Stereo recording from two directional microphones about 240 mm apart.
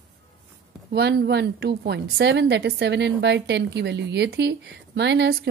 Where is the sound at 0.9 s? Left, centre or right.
Right.